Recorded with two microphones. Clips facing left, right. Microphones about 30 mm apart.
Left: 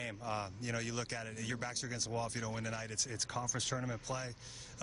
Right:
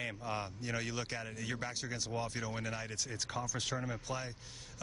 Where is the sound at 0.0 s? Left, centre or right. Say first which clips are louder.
Right 1 dB; centre.